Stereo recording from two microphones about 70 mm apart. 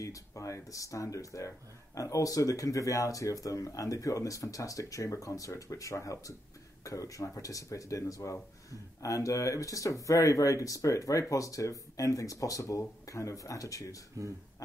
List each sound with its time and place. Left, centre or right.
0.0 s speech: left